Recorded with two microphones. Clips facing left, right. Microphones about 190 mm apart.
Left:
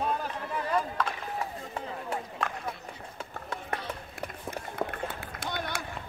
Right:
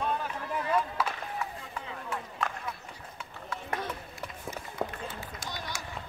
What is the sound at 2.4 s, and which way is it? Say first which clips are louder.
Run: right 2 dB; centre (ahead or behind).